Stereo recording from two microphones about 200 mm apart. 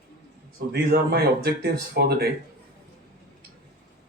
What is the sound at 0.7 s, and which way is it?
Speech, 50° right (ahead or behind).